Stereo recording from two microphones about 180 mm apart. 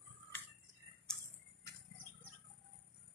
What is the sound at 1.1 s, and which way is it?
Tick-tock, 5° left (ahead or behind).